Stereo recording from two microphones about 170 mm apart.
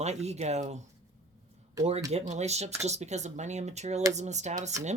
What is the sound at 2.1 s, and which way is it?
Speech, 40° right (ahead or behind).